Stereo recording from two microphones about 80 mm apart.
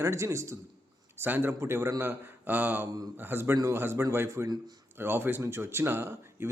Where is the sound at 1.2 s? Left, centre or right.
Right.